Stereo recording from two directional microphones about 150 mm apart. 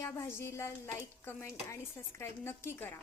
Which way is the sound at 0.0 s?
20° left (ahead or behind).